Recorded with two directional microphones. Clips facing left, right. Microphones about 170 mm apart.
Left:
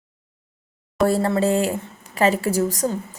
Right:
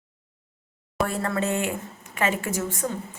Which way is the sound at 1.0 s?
30° left (ahead or behind).